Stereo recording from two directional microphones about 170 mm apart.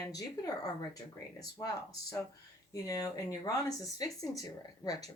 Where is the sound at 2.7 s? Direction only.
20° left (ahead or behind).